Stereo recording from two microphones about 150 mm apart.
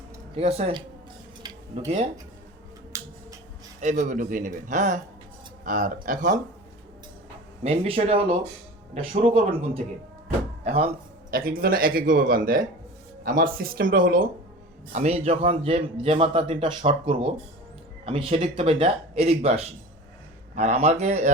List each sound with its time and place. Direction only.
0.3 s a man's voice: 40° right (ahead or behind)
1.4 s tick-tock: 30° right (ahead or behind)
3.8 s speech: 55° right (ahead or behind)
7.6 s a man's voice: 40° right (ahead or behind)
11.3 s speech: 70° right (ahead or behind)
14.9 s a man's voice: 45° right (ahead or behind)